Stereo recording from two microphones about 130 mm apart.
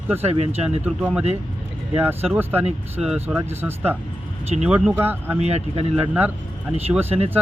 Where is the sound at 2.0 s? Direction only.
15° right (ahead or behind).